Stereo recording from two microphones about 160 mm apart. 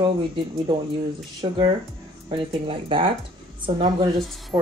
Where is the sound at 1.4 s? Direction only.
30° right (ahead or behind).